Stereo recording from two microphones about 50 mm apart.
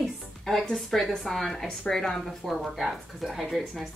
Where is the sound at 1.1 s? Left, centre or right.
Centre.